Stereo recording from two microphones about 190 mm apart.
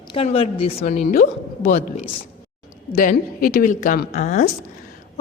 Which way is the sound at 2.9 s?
50° left (ahead or behind).